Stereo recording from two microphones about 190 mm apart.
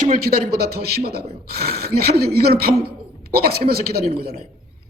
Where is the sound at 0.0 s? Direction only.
50° right (ahead or behind).